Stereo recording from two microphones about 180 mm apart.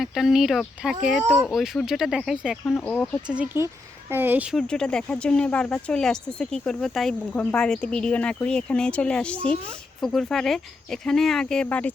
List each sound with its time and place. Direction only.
0.0 s speech: centre (ahead or behind)
3.2 s speech: 5° right (ahead or behind)
4.5 s speech: 5° left (ahead or behind)